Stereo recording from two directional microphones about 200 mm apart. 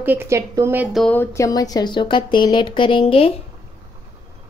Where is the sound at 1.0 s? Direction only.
10° left (ahead or behind); by 3.3 s 30° left (ahead or behind).